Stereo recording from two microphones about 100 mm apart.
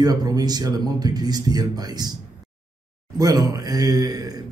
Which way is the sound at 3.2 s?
40° right (ahead or behind).